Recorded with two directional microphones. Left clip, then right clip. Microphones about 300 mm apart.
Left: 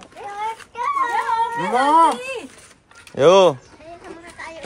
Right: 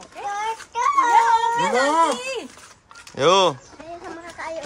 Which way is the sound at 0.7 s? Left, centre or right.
Right.